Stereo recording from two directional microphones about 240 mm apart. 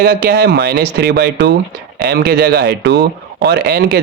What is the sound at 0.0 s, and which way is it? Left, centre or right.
A man's voice, right.